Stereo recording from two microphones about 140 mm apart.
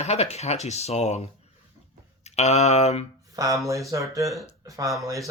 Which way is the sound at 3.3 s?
25° right (ahead or behind).